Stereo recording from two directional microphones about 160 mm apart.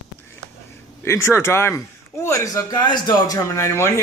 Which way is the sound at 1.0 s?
15° left (ahead or behind).